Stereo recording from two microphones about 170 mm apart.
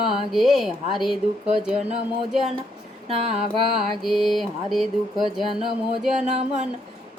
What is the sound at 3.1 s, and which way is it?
Music, 35° right (ahead or behind).